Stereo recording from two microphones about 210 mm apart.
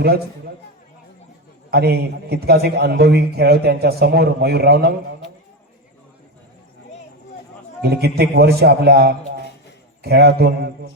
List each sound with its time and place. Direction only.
1.7 s a man's voice: 45° right (ahead or behind)
7.8 s a man's voice: 50° right (ahead or behind)